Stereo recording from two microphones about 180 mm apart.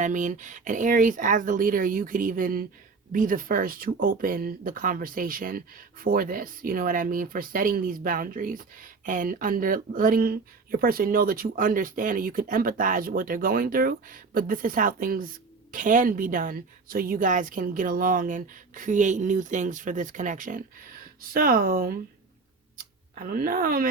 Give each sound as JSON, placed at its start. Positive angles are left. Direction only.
{"t": 0.0, "sound": "speech", "side_deg": -45}
{"t": 23.1, "sound": "speech", "side_deg": -55}